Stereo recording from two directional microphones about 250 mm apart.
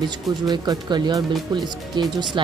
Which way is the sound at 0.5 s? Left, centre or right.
Centre.